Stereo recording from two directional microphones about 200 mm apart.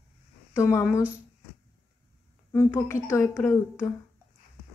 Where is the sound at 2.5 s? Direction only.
10° left (ahead or behind).